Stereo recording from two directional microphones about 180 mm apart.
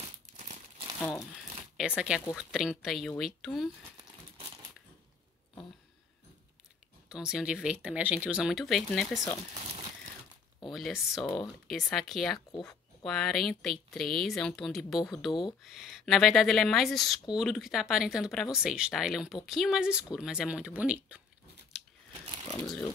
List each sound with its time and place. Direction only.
0.4 s crumpling: 45° right (ahead or behind)
1.8 s speech: 5° right (ahead or behind)
7.1 s speech: 5° right (ahead or behind)
10.7 s speech: centre (ahead or behind)
22.6 s speech: 5° left (ahead or behind)